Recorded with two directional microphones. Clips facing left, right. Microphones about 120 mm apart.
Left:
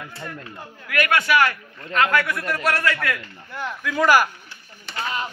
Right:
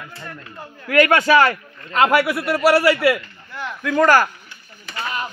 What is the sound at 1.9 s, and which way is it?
Speech, 25° right (ahead or behind).